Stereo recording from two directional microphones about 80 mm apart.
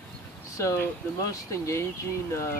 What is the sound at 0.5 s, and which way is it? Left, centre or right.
Speech, left.